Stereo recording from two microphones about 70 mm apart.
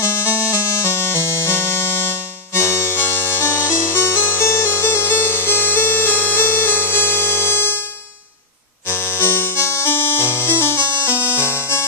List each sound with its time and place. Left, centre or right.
0.0 s music: left
8.9 s music: left